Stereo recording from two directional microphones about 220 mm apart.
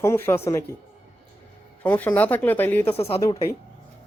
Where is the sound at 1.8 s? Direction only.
10° left (ahead or behind).